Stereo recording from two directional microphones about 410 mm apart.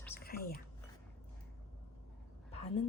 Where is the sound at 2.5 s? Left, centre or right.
Centre.